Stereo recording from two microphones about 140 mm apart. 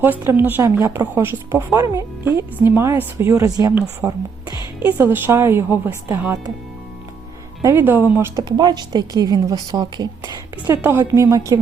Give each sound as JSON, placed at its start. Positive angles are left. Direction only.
{"t": 0.0, "sound": "a woman's voice", "side_deg": -15}
{"t": 7.6, "sound": "a woman's voice", "side_deg": -20}
{"t": 8.4, "sound": "speech", "side_deg": -30}
{"t": 10.7, "sound": "speech", "side_deg": -15}